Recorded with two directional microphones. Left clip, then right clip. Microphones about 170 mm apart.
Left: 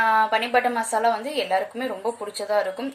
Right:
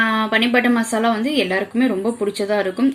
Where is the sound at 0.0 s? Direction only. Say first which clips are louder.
Right 2 dB; 30° right (ahead or behind).